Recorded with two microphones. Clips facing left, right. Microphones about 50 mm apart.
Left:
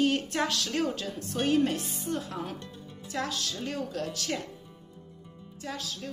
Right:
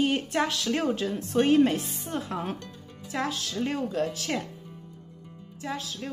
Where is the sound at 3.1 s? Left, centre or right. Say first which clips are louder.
Right 3 dB; centre.